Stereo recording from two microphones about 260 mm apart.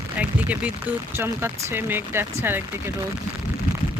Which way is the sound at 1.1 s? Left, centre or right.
Centre.